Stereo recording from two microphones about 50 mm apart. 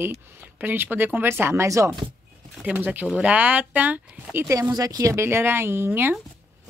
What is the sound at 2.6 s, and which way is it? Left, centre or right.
Speech, right.